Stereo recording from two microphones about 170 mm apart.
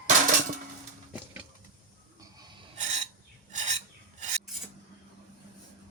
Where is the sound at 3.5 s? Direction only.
45° right (ahead or behind).